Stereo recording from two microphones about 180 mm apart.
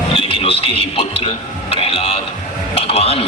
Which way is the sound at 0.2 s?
30° left (ahead or behind).